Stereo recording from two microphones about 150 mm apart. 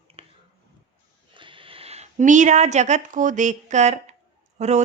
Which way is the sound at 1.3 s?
35° right (ahead or behind).